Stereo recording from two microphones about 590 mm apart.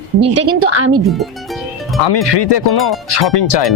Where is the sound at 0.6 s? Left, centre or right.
Right.